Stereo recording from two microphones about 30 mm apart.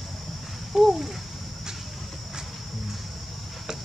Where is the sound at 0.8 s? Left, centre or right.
Centre.